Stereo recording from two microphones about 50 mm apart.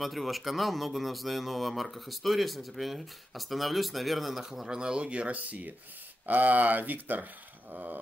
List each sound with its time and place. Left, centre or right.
0.0 s speech: centre; by 8.0 s right